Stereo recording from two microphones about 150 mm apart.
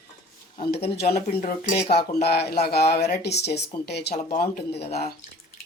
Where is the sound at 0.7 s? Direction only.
90° left.